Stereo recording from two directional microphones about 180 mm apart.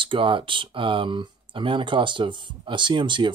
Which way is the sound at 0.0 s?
30° right (ahead or behind).